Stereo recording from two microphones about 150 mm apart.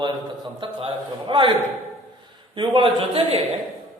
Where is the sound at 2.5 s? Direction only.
35° right (ahead or behind).